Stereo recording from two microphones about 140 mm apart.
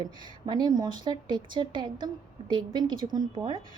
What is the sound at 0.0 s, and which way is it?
A woman's voice, 30° right (ahead or behind).